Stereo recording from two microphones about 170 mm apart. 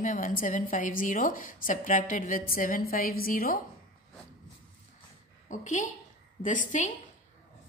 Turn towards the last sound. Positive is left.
turn(degrees=50)  # may be behind; listen again after turning